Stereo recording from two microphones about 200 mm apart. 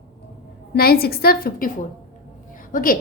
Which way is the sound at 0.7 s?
50° left (ahead or behind).